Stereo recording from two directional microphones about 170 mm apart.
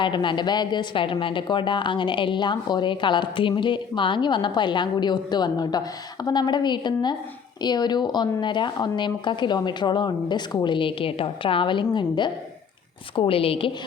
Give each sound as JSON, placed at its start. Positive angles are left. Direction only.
{"t": 0.0, "sound": "a woman's voice", "side_deg": 30}